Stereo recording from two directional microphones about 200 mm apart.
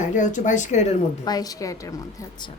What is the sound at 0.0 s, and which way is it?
Speech, 40° left (ahead or behind).